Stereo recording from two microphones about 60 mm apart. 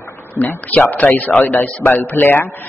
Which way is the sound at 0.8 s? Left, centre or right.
Left.